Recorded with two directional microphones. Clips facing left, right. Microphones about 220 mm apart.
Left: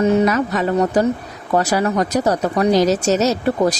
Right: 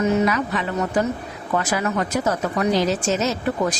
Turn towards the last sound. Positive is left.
turn(degrees=40)  # may be behind; listen again after turning